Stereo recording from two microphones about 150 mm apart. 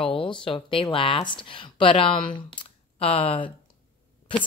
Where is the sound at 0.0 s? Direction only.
35° left (ahead or behind).